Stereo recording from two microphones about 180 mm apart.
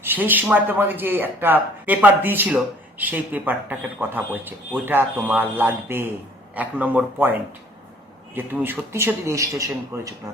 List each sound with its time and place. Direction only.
0.0 s speech: 10° right (ahead or behind)
8.4 s speech: 10° right (ahead or behind)